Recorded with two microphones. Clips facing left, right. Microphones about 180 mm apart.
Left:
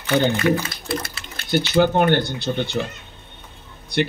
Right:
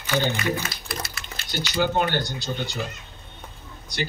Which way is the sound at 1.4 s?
55° left (ahead or behind).